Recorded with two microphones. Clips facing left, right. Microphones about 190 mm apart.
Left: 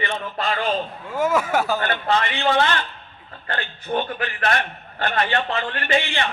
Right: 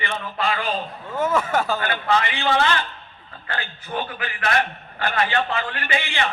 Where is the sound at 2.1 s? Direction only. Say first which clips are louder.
Even; 40° left (ahead or behind).